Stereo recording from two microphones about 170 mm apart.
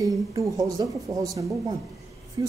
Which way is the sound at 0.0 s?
20° right (ahead or behind).